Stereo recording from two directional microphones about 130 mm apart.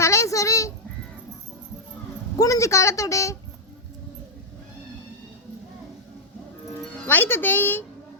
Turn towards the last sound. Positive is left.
turn(degrees=15)  # may be behind; listen again after turning